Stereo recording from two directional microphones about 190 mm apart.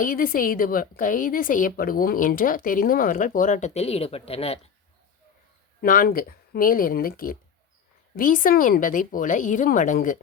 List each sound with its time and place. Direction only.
0.0 s a woman's voice: 50° left (ahead or behind); by 4.7 s 30° left (ahead or behind)
5.8 s a woman's voice: 50° left (ahead or behind)